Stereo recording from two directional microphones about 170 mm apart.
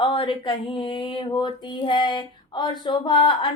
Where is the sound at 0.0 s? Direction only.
30° left (ahead or behind).